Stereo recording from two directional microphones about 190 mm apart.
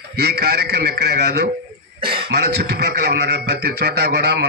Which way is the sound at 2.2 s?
60° right (ahead or behind).